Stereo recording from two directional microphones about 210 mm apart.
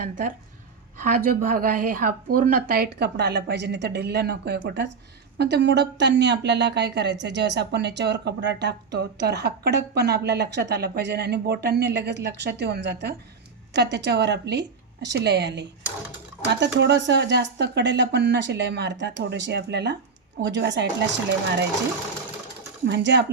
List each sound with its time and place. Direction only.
0.0 s speech: 40° right (ahead or behind); by 20.8 s 55° right (ahead or behind)
22.9 s speech: 55° right (ahead or behind)